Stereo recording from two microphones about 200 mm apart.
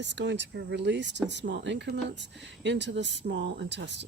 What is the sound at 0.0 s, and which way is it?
Speech, 60° right (ahead or behind).